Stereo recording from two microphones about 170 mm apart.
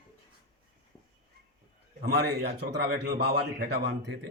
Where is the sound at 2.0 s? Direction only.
70° right (ahead or behind).